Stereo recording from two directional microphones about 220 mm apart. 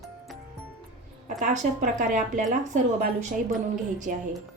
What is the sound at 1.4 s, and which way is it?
A woman's voice, 35° right (ahead or behind).